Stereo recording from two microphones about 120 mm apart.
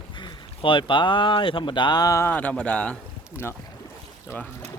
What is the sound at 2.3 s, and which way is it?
Speech, 10° left (ahead or behind).